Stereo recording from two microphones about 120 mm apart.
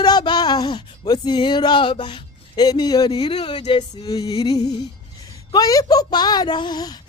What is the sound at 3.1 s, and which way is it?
Speech, 45° left (ahead or behind).